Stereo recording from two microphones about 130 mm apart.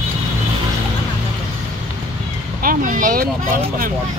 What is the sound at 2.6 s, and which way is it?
Speech, 90° right.